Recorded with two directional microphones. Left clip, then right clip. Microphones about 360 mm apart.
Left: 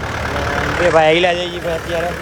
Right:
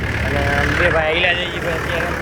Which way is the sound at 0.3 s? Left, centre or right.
Centre.